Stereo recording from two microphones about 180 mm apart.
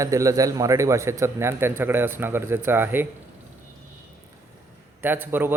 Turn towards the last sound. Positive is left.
turn(degrees=-10)  # may be behind; listen again after turning